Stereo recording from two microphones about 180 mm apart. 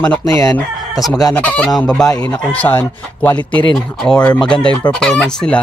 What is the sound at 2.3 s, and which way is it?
Speech, 10° left (ahead or behind).